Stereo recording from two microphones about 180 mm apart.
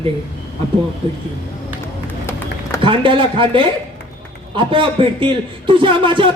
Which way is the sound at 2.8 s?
30° right (ahead or behind).